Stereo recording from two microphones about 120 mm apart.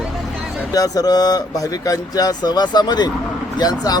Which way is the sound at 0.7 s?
30° left (ahead or behind).